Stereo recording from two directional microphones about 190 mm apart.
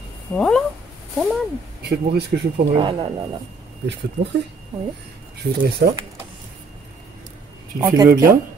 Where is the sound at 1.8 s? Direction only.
60° right (ahead or behind).